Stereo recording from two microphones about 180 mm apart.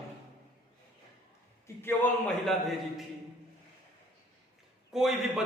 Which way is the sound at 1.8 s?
5° left (ahead or behind).